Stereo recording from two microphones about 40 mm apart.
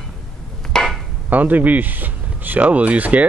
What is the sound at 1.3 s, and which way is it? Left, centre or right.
Speech, right.